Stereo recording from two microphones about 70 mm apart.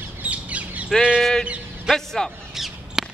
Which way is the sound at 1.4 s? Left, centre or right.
Centre.